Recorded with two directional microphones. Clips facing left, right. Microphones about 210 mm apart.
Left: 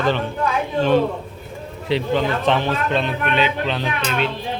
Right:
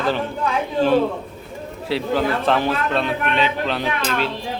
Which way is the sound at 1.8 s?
5° right (ahead or behind).